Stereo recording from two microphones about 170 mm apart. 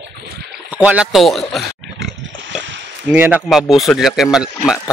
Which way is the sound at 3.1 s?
10° right (ahead or behind).